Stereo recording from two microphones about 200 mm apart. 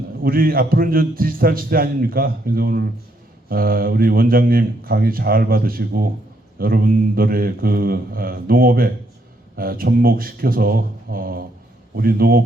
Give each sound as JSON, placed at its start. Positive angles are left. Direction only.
{"t": 0.2, "sound": "a man's voice", "side_deg": -45}